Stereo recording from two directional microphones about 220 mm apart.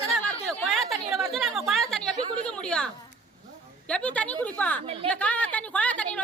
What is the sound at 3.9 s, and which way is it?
A woman's voice, 5° left (ahead or behind).